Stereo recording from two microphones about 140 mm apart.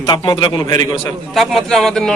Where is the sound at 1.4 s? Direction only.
Centre (ahead or behind).